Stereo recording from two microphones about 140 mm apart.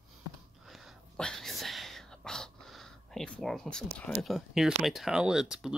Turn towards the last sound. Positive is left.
turn(degrees=-5)  # may be behind; listen again after turning